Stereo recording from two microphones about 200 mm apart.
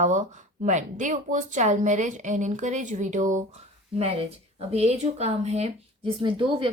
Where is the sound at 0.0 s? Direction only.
35° right (ahead or behind).